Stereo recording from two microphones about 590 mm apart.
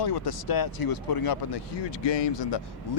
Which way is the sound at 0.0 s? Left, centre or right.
Left.